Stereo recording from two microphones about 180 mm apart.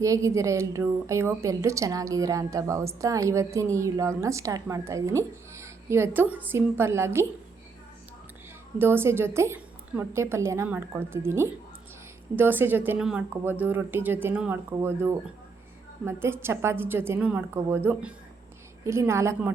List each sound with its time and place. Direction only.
0.0 s a woman's voice: 15° right (ahead or behind)
8.8 s a woman's voice: 15° right (ahead or behind)